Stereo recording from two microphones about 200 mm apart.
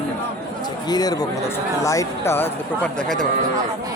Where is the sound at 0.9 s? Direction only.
20° left (ahead or behind); by 3.2 s 5° left (ahead or behind).